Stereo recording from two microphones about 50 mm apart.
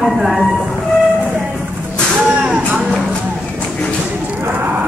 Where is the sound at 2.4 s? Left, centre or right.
Centre.